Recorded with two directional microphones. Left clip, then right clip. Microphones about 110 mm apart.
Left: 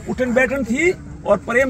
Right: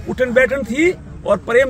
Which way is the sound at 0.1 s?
30° right (ahead or behind).